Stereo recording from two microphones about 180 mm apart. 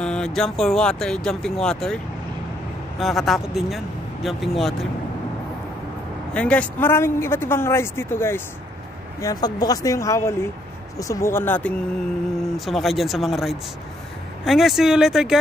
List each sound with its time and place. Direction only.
0.0 s speech: 5° left (ahead or behind)
3.0 s speech: centre (ahead or behind)
6.3 s speech: 5° left (ahead or behind)